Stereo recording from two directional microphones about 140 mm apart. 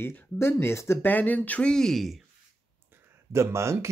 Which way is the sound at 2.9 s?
20° right (ahead or behind).